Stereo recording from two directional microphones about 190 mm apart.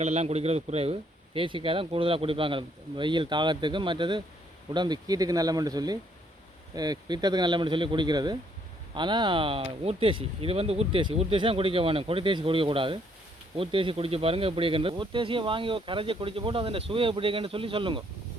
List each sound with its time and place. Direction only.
0.0 s speech: 35° right (ahead or behind)